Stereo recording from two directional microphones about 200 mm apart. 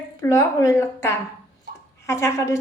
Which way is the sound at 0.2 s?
15° left (ahead or behind).